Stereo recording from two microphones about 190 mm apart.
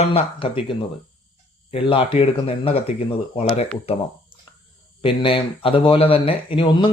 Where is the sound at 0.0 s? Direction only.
30° left (ahead or behind).